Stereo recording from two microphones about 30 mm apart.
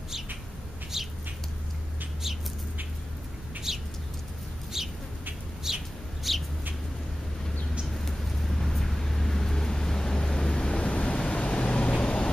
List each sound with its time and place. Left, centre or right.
0.9 s bird: centre
3.7 s bird: centre
4.7 s chicken: centre
5.7 s bird: centre
6.2 s bird: centre
7.9 s vehicle: centre; by 12.3 s left